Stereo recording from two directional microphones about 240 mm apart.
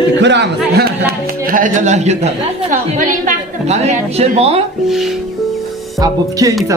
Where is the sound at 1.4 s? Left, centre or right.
Right.